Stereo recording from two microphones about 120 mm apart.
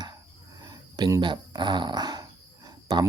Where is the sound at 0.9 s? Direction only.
35° right (ahead or behind).